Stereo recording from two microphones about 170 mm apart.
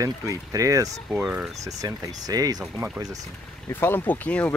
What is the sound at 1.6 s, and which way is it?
Speech, 20° right (ahead or behind).